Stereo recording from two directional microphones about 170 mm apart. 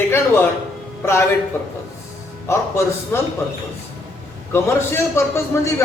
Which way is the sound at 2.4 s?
15° left (ahead or behind).